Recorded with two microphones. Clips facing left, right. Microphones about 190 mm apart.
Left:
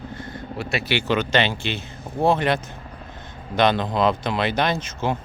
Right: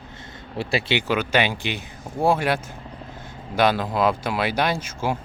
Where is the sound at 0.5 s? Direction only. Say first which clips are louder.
Right 2 dB; 30° right (ahead or behind).